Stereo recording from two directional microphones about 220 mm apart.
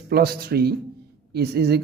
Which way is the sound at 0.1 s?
45° right (ahead or behind).